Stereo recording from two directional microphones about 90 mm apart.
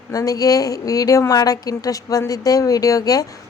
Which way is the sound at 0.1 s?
40° left (ahead or behind).